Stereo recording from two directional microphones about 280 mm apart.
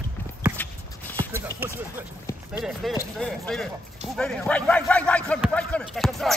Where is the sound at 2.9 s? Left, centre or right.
Centre.